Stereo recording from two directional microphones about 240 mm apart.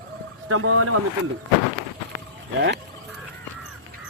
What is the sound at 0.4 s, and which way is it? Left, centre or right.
Speech, right.